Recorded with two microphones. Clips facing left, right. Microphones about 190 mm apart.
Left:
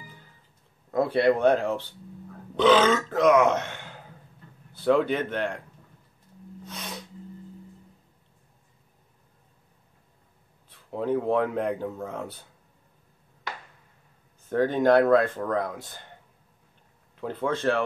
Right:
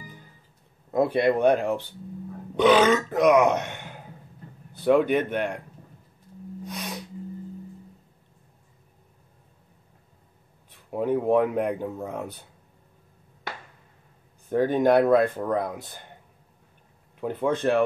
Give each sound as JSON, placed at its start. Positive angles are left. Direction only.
{"t": 0.9, "sound": "speech", "side_deg": -15}
{"t": 6.6, "sound": "sneeze", "side_deg": -15}
{"t": 10.9, "sound": "speech", "side_deg": -15}
{"t": 14.5, "sound": "speech", "side_deg": -15}
{"t": 17.2, "sound": "speech", "side_deg": -15}